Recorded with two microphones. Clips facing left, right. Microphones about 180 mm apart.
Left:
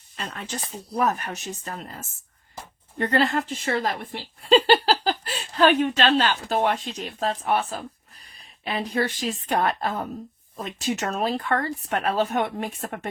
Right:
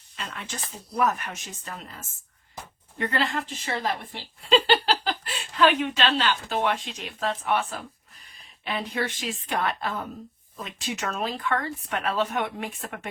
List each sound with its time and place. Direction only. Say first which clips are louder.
0.2 s a woman's voice: left 3 dB; 40° left (ahead or behind)